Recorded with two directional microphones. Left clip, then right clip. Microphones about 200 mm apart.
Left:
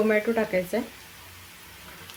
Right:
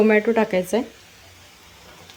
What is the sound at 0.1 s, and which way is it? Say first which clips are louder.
Speech: right 6 dB; 40° right (ahead or behind).